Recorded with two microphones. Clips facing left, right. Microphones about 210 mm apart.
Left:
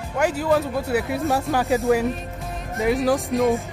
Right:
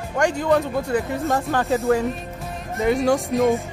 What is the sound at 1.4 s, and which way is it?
Speech, centre (ahead or behind).